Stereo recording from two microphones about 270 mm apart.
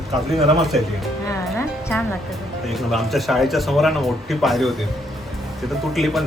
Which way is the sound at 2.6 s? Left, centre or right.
Centre.